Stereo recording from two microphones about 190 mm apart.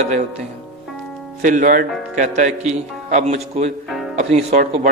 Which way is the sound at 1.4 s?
45° right (ahead or behind).